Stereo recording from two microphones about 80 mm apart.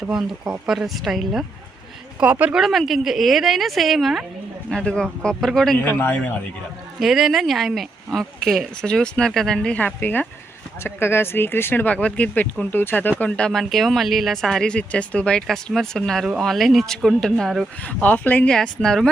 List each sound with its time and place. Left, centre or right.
0.1 s speech: centre
2.2 s speech: centre
2.6 s speech: centre
4.7 s speech: centre
5.8 s speech: left
7.0 s speech: centre
17.8 s speech: centre
18.5 s speech: centre